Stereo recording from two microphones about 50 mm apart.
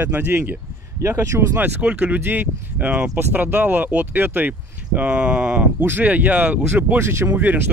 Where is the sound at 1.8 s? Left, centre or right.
Right.